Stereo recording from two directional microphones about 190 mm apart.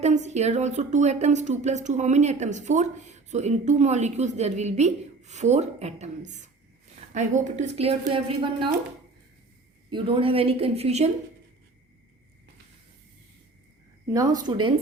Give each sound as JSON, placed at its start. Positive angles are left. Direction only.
{"t": 0.0, "sound": "a woman's voice", "side_deg": -35}
{"t": 9.9, "sound": "a woman's voice", "side_deg": -30}
{"t": 14.1, "sound": "a woman's voice", "side_deg": -20}